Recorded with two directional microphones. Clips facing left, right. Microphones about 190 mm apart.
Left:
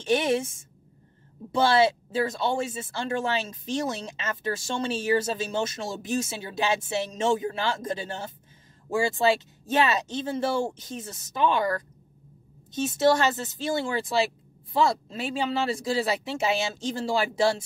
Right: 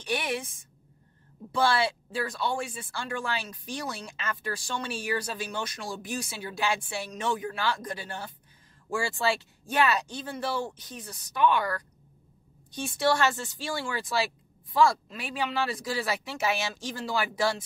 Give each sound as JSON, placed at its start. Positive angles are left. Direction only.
{"t": 0.0, "sound": "speech", "side_deg": 25}